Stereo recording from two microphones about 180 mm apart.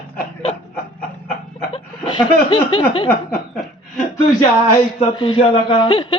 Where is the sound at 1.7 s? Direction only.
30° left (ahead or behind).